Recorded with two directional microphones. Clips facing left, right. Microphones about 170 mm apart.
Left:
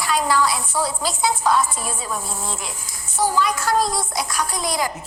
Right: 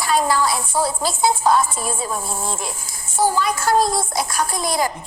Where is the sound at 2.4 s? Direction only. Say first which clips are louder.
Right 3 dB; 50° right (ahead or behind).